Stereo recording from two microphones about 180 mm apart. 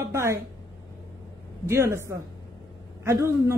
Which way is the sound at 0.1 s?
15° right (ahead or behind).